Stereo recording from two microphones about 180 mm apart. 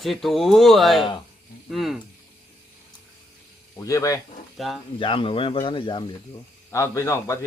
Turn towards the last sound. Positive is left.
turn(degrees=15)  # may be behind; listen again after turning